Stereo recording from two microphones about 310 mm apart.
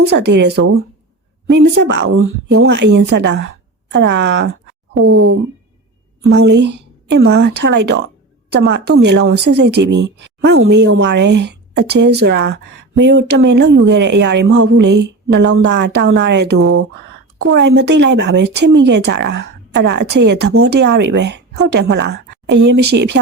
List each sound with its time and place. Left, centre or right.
0.0 s a woman's voice: right
6.2 s a woman's voice: right
16.6 s a woman's voice: right